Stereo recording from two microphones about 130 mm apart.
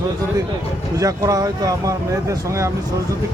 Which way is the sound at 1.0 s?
25° right (ahead or behind).